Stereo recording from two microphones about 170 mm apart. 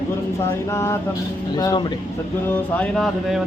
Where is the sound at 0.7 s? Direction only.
15° left (ahead or behind).